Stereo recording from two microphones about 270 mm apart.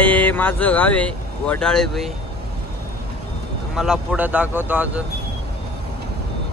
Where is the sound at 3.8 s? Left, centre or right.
Centre.